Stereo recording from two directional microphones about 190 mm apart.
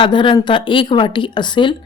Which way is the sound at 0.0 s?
25° left (ahead or behind).